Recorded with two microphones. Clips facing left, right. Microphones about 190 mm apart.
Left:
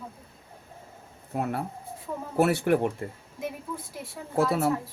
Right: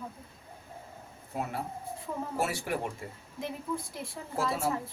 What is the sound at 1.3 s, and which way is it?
Speech, 60° left (ahead or behind).